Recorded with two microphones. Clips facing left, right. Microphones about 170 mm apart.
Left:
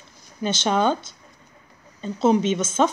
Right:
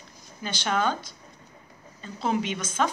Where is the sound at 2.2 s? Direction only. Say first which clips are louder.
Left 8 dB; 25° left (ahead or behind).